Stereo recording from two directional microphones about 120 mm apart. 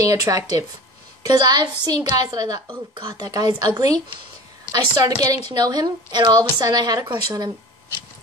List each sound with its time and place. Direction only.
0.0 s a woman's voice: 30° right (ahead or behind)
5.0 s a woman's voice: 30° right (ahead or behind)